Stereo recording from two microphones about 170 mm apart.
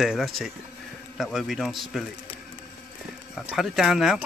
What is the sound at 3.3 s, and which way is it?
Speech, centre (ahead or behind).